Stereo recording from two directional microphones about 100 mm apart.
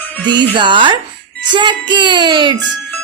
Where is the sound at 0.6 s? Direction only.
50° right (ahead or behind).